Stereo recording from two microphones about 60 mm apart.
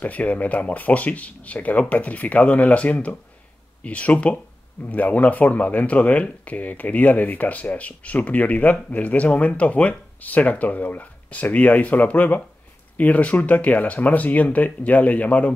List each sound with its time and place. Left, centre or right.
0.0 s speech: left